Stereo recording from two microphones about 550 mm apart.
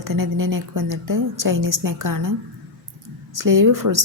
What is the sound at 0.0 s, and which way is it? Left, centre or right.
A woman's voice, right.